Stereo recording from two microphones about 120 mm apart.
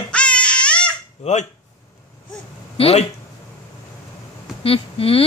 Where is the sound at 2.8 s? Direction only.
60° left (ahead or behind).